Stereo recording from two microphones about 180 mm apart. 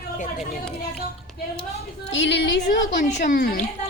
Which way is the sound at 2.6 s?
45° left (ahead or behind).